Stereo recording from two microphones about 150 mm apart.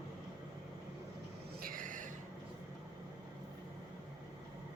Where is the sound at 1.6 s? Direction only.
65° right (ahead or behind).